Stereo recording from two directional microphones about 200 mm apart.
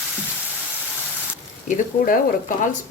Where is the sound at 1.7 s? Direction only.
45° left (ahead or behind).